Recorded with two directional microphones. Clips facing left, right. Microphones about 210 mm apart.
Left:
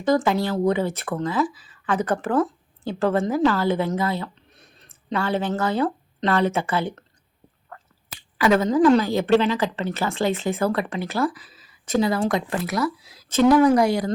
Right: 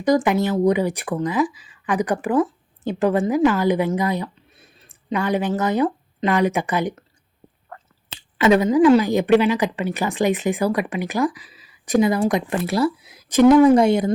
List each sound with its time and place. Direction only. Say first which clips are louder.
0.0 s speech: right 2 dB; 15° right (ahead or behind)
4.5 s a sound: right 1 dB; 5° right (ahead or behind)
6.1 s speech: right 2 dB; 15° right (ahead or behind)